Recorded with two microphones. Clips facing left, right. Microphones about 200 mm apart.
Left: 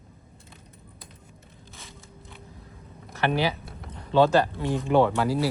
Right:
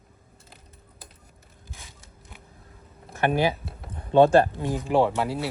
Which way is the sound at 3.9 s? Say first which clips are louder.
Right 3 dB; 50° right (ahead or behind).